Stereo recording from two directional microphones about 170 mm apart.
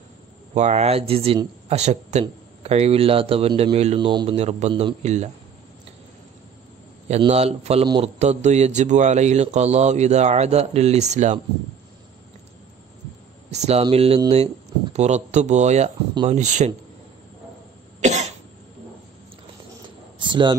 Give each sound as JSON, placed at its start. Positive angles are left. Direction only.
{"t": 0.6, "sound": "a man's voice", "side_deg": -40}
{"t": 4.1, "sound": "a man's voice", "side_deg": -25}
{"t": 4.4, "sound": "a man's voice", "side_deg": -40}
{"t": 7.1, "sound": "a man's voice", "side_deg": -40}
{"t": 13.5, "sound": "a man's voice", "side_deg": -40}
{"t": 18.0, "sound": "cough", "side_deg": -40}
{"t": 20.2, "sound": "a sound", "side_deg": -30}